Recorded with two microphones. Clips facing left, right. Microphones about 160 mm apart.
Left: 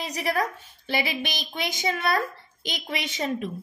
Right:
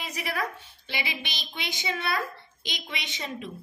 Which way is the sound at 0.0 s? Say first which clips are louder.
Left 5 dB; 40° left (ahead or behind).